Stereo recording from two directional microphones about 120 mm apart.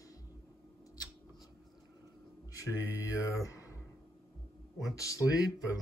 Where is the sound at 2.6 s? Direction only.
25° left (ahead or behind).